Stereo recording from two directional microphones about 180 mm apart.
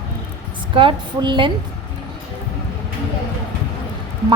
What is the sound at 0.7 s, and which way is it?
Speech, 30° right (ahead or behind).